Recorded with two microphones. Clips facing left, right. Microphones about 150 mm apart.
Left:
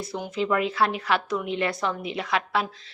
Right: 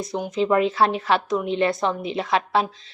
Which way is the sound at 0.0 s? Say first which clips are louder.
Right 4 dB; 20° right (ahead or behind).